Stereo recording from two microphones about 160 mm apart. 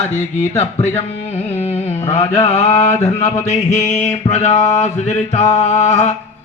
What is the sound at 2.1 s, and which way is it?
Mantra, 45° left (ahead or behind).